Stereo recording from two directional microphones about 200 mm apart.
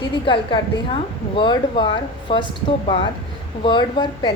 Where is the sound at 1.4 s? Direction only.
25° left (ahead or behind).